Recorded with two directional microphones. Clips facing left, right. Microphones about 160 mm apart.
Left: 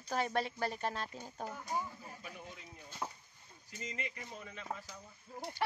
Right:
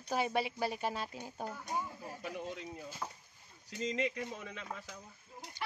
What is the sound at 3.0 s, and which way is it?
Chop, 10° left (ahead or behind).